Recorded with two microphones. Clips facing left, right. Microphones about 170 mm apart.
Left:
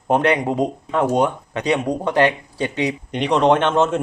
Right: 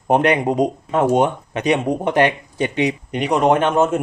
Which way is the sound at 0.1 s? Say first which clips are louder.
Right 2 dB; 20° right (ahead or behind).